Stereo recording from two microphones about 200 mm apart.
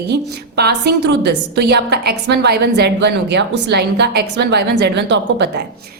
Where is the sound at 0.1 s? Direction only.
55° right (ahead or behind).